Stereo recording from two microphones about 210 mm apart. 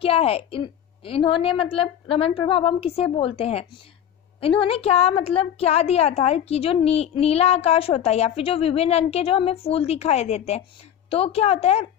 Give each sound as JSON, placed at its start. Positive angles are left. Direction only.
{"t": 0.0, "sound": "a woman's voice", "side_deg": 25}